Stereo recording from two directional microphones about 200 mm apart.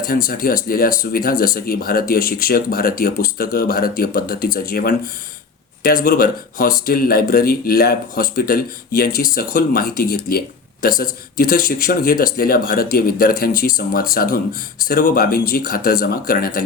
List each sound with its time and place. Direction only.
0.0 s speech: 45° left (ahead or behind)